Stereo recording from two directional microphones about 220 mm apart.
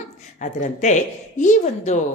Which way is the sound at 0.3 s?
35° left (ahead or behind).